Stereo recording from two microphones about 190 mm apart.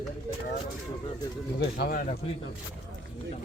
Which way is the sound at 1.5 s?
55° left (ahead or behind).